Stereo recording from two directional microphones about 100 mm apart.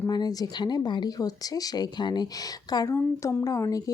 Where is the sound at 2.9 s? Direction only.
30° left (ahead or behind).